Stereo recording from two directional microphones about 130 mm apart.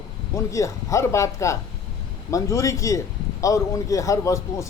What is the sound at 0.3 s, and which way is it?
Speech, 25° left (ahead or behind).